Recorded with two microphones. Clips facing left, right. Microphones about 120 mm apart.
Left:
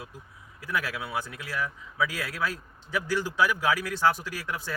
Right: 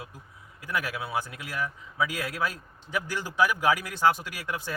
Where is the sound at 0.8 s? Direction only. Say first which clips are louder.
Right 1 dB; 15° right (ahead or behind).